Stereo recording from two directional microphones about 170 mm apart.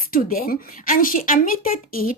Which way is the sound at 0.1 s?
60° left (ahead or behind).